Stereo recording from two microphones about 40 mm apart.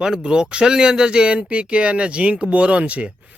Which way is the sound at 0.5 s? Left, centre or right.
Right.